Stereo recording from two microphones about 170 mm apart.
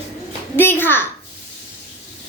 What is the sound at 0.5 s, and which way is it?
Speech, 10° left (ahead or behind).